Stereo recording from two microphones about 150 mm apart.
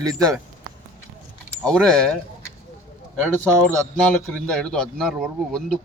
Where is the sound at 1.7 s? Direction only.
5° left (ahead or behind).